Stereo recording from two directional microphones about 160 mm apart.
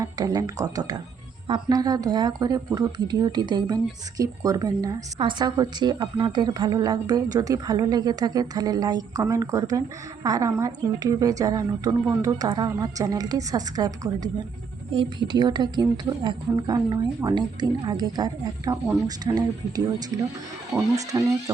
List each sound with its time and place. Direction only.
0.0 s a woman's voice: 20° right (ahead or behind)